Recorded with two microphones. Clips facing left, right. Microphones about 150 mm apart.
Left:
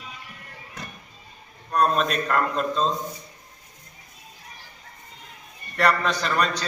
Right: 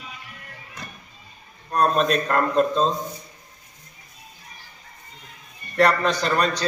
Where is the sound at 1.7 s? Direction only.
35° right (ahead or behind).